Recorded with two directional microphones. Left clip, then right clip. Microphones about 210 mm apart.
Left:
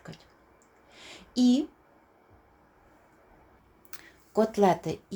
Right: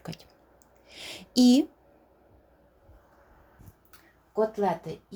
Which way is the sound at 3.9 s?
55° left (ahead or behind).